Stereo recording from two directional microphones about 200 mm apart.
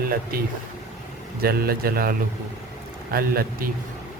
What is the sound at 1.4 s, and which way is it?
A man's voice, 50° right (ahead or behind).